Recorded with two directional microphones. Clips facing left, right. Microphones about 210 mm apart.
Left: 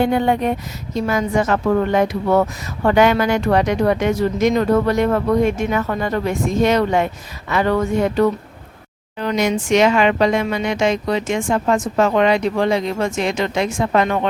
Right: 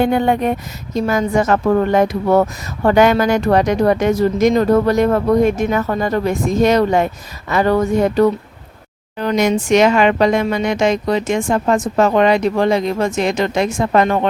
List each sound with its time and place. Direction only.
0.0 s speech: 50° right (ahead or behind)